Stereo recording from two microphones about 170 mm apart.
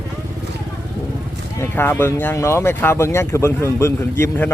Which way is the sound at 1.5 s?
15° left (ahead or behind).